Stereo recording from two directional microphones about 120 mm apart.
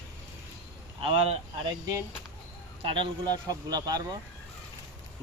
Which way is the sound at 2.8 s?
45° right (ahead or behind).